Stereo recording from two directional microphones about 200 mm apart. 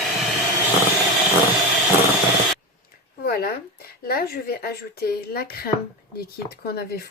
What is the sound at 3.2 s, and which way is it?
A woman's voice, 50° left (ahead or behind).